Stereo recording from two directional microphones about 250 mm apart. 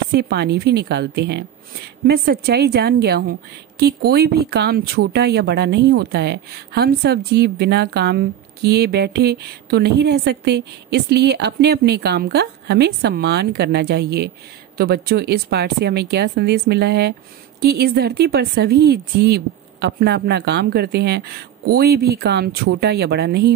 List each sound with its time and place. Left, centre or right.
0.1 s speech: right